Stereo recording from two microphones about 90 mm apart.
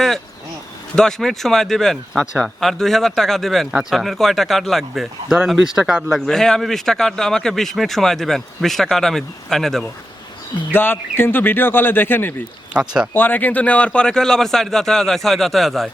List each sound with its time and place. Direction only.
0.9 s speech: 5° left (ahead or behind)
6.1 s speech: 5° left (ahead or behind)
10.7 s speech: 25° left (ahead or behind)
12.7 s speech: 10° right (ahead or behind)
13.1 s speech: 20° left (ahead or behind); by 15.9 s centre (ahead or behind)